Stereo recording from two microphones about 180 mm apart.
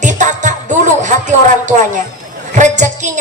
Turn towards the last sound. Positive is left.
turn(degrees=-40)  # may be behind; listen again after turning